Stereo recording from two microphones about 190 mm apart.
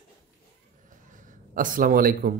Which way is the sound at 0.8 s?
45° right (ahead or behind).